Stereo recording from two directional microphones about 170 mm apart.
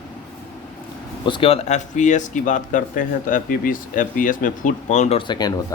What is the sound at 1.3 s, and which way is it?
Speech, 35° left (ahead or behind).